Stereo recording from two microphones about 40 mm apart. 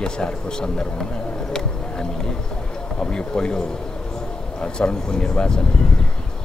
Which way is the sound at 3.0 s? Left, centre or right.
Left.